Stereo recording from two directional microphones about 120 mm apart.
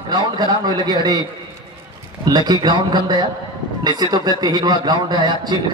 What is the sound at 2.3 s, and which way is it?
A man's voice, 35° right (ahead or behind).